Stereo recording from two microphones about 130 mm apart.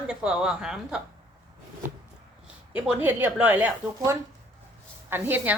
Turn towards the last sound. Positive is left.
turn(degrees=-15)  # may be behind; listen again after turning